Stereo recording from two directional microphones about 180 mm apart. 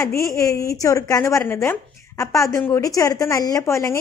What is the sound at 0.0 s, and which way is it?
A woman's voice, 15° left (ahead or behind).